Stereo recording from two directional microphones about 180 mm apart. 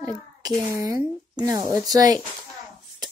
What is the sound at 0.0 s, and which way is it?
A child's voice, 20° right (ahead or behind).